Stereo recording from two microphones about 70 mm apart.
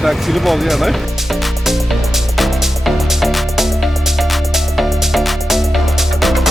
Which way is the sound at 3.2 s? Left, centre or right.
Centre.